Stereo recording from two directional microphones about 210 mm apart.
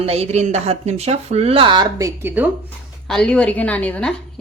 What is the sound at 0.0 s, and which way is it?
Speech, 30° right (ahead or behind).